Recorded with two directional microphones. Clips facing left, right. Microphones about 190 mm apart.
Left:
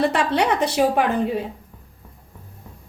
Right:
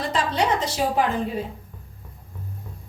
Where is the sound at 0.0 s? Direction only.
65° left (ahead or behind).